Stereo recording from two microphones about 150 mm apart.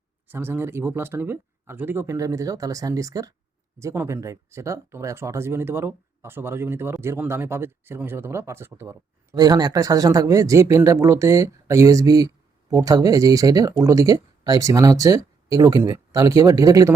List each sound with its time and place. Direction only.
0.3 s speech: 15° right (ahead or behind)